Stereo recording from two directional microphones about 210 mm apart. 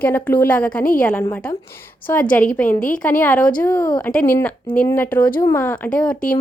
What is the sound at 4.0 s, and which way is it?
A woman's voice, 5° left (ahead or behind).